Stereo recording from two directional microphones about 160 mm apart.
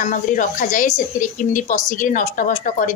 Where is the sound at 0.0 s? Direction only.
55° left (ahead or behind).